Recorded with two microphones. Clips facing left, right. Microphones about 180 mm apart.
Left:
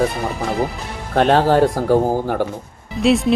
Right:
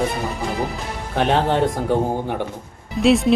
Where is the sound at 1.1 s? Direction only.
70° left (ahead or behind).